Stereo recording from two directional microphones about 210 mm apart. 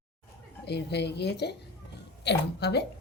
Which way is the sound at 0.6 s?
50° left (ahead or behind).